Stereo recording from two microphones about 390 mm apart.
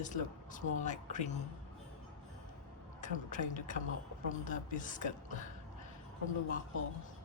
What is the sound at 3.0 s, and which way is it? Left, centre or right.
Speech, centre.